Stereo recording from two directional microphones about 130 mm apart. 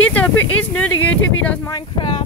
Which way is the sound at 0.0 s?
10° left (ahead or behind).